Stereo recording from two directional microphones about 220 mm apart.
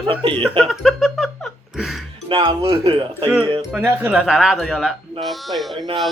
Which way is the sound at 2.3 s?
25° right (ahead or behind).